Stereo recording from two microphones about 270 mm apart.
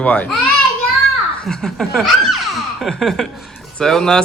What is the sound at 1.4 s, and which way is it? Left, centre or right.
Speech, centre.